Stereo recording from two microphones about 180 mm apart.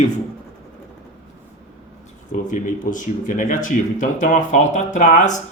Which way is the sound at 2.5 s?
45° left (ahead or behind).